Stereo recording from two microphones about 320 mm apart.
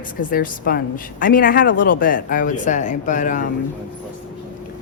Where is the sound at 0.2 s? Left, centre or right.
Left.